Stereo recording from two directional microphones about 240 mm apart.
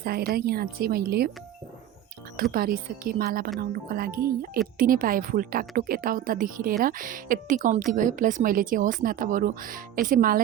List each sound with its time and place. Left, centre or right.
0.0 s a woman's voice: right
2.3 s a woman's voice: right